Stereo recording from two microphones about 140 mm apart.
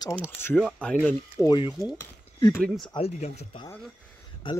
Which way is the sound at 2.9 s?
50° left (ahead or behind).